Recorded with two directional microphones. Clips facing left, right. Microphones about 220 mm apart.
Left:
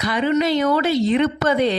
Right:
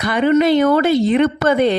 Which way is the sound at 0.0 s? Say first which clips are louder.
Right 5 dB; 55° right (ahead or behind).